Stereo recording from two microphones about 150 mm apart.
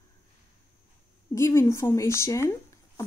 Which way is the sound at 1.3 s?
20° left (ahead or behind).